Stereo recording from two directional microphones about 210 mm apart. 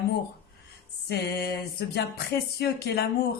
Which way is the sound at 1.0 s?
50° left (ahead or behind).